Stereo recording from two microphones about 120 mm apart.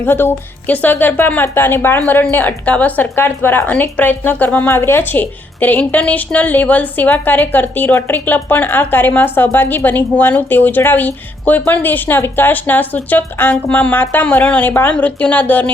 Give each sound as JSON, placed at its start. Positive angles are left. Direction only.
{"t": 0.0, "sound": "speech", "side_deg": 20}